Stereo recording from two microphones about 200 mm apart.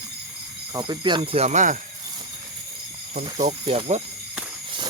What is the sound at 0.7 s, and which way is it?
Speech, 20° right (ahead or behind).